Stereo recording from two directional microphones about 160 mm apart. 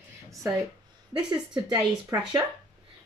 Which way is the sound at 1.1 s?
30° right (ahead or behind).